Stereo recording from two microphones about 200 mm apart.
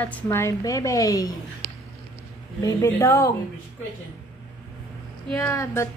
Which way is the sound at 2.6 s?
15° left (ahead or behind).